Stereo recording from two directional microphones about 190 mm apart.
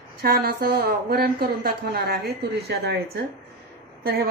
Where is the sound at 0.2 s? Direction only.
55° right (ahead or behind).